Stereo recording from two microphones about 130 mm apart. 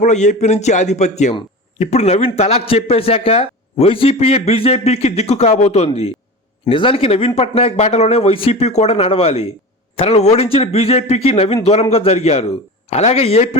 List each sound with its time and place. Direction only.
0.0 s a man's voice: 65° left (ahead or behind)